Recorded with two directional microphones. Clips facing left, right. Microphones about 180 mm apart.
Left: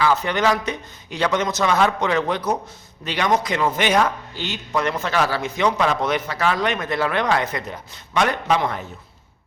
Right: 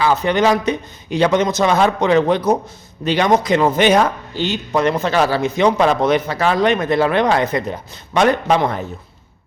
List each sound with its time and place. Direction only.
0.0 s a man's voice: 20° right (ahead or behind)